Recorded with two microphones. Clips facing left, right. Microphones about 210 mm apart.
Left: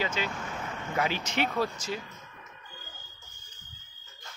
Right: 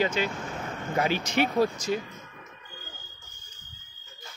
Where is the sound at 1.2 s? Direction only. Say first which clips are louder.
Right 5 dB; 10° right (ahead or behind).